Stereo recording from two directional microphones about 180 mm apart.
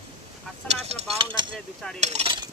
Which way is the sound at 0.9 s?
30° right (ahead or behind).